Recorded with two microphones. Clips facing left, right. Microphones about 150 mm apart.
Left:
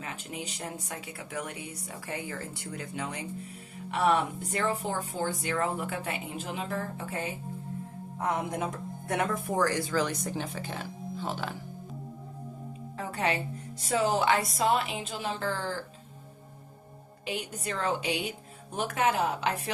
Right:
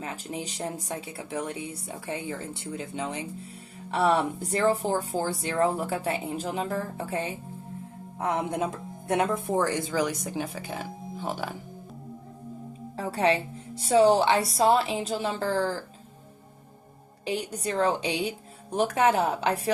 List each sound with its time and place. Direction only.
0.0 s speech: 35° right (ahead or behind)
9.0 s speech: 25° right (ahead or behind); by 11.4 s 10° right (ahead or behind)
13.0 s speech: 35° right (ahead or behind)
17.2 s speech: 35° right (ahead or behind)